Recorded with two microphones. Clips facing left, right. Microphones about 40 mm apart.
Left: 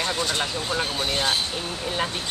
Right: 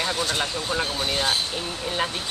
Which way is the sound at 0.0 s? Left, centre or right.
Centre.